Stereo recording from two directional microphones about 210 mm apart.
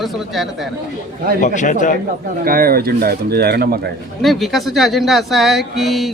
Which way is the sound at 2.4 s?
45° right (ahead or behind).